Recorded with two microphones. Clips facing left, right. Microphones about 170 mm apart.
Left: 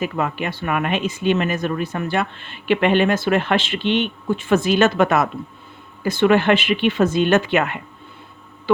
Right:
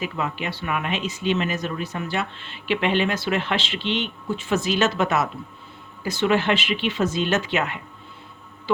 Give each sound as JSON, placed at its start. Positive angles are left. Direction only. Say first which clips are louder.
{"t": 0.0, "sound": "speech", "louder": "left 5 dB", "side_deg": 50}